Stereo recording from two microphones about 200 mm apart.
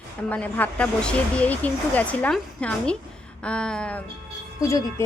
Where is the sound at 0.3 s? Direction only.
10° left (ahead or behind).